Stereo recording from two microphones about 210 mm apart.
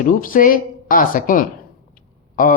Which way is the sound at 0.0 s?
40° left (ahead or behind).